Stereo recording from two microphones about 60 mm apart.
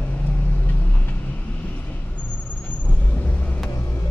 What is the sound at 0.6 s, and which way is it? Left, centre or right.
Vehicle, left.